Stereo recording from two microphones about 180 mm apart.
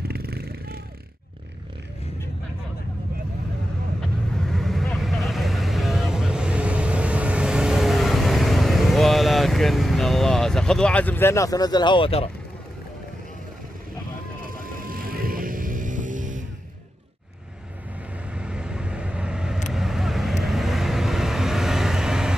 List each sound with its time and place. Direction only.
0.1 s vehicle: 60° right (ahead or behind)
4.5 s vehicle: centre (ahead or behind); by 12.3 s 30° left (ahead or behind)
14.6 s music: 50° right (ahead or behind)
18.3 s vehicle: 5° right (ahead or behind)